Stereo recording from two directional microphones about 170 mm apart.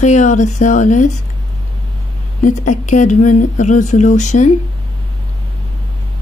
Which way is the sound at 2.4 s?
45° left (ahead or behind).